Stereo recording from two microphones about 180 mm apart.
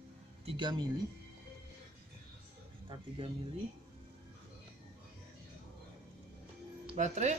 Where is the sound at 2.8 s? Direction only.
30° right (ahead or behind).